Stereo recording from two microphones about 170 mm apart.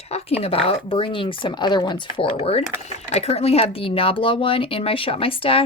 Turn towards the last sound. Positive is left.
turn(degrees=35)  # may be behind; listen again after turning